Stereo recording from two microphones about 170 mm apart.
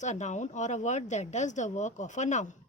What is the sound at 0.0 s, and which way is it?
Speech, 45° left (ahead or behind).